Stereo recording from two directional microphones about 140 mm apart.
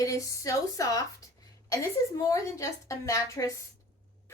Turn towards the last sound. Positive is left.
turn(degrees=25)  # may be behind; listen again after turning